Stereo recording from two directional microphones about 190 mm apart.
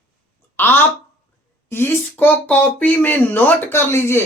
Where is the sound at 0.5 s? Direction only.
10° left (ahead or behind).